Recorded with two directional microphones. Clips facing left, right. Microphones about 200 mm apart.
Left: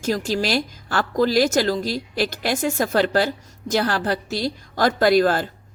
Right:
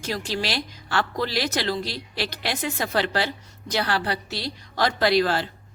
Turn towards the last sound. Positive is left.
turn(degrees=50)  # may be behind; listen again after turning